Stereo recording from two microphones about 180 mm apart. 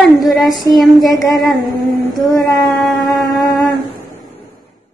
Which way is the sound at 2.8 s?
Centre (ahead or behind).